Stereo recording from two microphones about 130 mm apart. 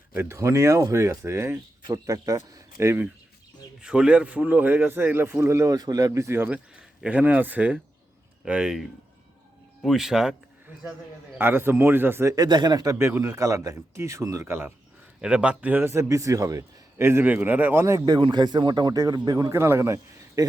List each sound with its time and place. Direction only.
0.1 s a man's voice: 20° right (ahead or behind)
3.8 s a man's voice: 5° right (ahead or behind)
11.3 s a man's voice: 15° right (ahead or behind)
12.4 s a man's voice: 35° right (ahead or behind)
15.2 s a man's voice: 10° right (ahead or behind)